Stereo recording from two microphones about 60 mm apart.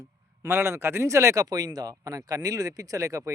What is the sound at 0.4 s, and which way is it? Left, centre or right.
Speech, right.